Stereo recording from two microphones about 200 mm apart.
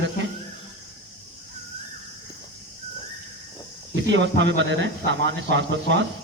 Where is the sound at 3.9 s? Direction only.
65° right (ahead or behind).